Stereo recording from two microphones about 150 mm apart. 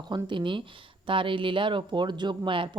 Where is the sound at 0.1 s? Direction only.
30° right (ahead or behind).